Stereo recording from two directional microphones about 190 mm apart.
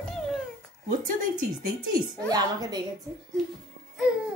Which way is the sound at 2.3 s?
20° right (ahead or behind).